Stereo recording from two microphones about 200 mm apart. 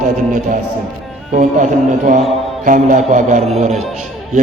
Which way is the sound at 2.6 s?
40° right (ahead or behind).